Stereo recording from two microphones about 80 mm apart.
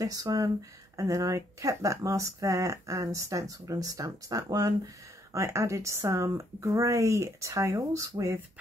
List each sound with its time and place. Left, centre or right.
0.0 s speech: right